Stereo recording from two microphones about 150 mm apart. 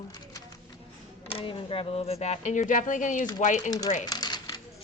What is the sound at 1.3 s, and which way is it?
Speech, 40° left (ahead or behind).